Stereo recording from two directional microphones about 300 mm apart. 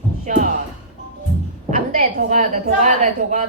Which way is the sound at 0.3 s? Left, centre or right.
Right.